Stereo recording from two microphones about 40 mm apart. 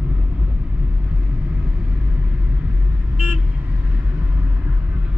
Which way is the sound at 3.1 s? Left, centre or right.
Right.